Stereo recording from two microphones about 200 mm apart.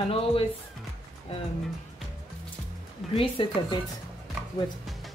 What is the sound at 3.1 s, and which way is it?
Speech, 25° left (ahead or behind).